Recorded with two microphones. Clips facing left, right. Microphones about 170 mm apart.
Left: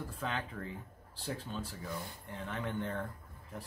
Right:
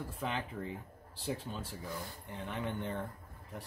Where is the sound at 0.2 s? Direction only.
15° right (ahead or behind).